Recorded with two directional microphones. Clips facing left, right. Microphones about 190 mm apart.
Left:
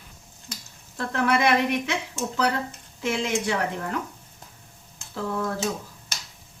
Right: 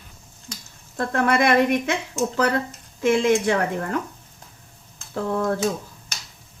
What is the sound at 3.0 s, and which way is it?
Speech, 50° right (ahead or behind).